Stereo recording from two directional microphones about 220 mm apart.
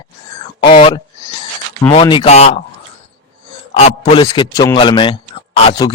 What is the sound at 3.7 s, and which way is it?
A man's voice, 25° left (ahead or behind).